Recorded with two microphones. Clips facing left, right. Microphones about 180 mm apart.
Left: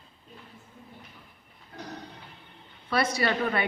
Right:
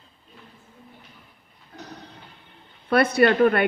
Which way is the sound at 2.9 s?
60° right (ahead or behind).